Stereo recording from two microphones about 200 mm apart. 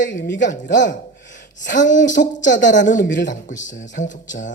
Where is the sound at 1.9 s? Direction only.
40° left (ahead or behind).